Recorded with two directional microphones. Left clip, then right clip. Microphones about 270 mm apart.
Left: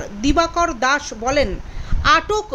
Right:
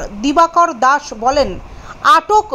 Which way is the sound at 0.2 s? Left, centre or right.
Centre.